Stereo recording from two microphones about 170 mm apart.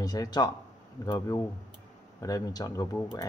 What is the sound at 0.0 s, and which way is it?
Speech, 20° left (ahead or behind).